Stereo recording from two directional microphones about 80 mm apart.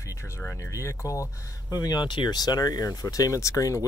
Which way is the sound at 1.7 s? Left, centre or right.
Left.